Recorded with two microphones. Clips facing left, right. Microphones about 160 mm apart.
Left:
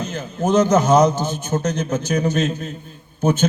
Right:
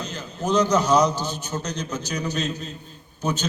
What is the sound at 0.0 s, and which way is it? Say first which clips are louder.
A man's voice: left 6 dB; 50° left (ahead or behind).